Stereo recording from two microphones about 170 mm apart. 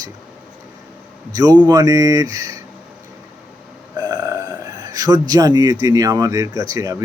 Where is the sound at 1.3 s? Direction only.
20° right (ahead or behind).